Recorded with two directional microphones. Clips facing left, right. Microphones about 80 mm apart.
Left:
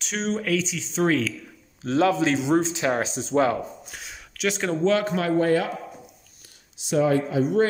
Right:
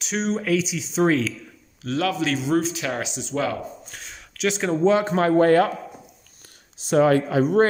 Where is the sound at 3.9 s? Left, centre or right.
Centre.